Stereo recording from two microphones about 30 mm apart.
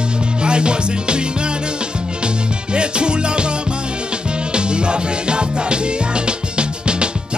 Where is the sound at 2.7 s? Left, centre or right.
Right.